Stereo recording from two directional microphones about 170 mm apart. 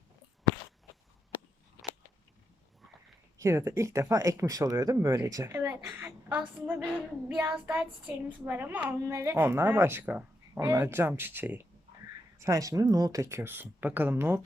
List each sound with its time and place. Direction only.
3.3 s a woman's voice: 15° right (ahead or behind)